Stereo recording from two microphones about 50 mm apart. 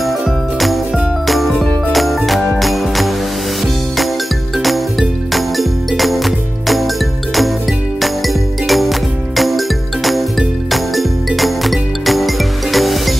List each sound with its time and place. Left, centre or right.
1.2 s music: centre
5.3 s music: centre
8.0 s music: centre
10.7 s music: centre